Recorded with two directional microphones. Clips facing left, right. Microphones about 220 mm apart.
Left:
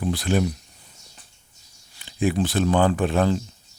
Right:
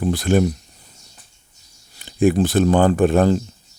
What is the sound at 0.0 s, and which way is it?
Speech, 45° right (ahead or behind).